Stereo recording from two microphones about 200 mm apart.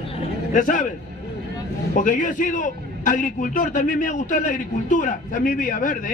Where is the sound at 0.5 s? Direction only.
40° left (ahead or behind).